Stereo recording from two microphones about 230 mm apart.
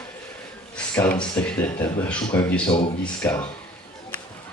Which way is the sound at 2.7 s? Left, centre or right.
Left.